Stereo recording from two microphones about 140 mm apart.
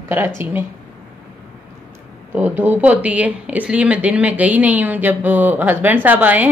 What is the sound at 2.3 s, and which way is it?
Speech, 15° right (ahead or behind).